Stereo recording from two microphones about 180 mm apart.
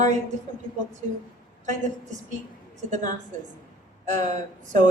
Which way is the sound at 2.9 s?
45° right (ahead or behind).